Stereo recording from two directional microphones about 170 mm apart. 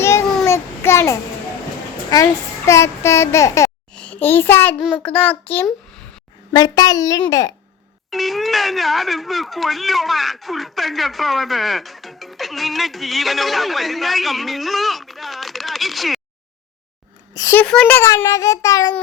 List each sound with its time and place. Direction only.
0.0 s child singing: 15° left (ahead or behind)
2.0 s a child's voice: 20° left (ahead or behind)
4.8 s speech: 5° right (ahead or behind)
5.0 s a child's voice: 10° left (ahead or behind)
6.5 s a child's voice: 25° left (ahead or behind)
8.1 s speech: centre (ahead or behind)
17.3 s speech: 20° left (ahead or behind)
17.6 s a child's voice: 5° left (ahead or behind)